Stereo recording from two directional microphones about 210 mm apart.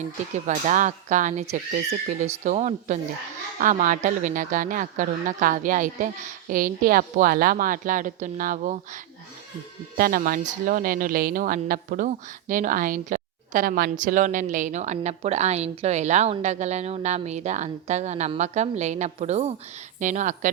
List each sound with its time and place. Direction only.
0.4 s a woman's voice: 35° right (ahead or behind)
10.0 s a woman's voice: 40° right (ahead or behind)